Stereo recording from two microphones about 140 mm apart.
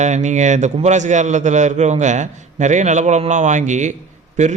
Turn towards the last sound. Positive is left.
turn(degrees=-60)  # may be behind; listen again after turning